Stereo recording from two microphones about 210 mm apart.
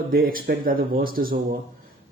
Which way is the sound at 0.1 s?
45° right (ahead or behind).